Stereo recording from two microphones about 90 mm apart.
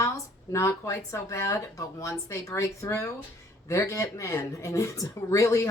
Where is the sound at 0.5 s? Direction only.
35° left (ahead or behind).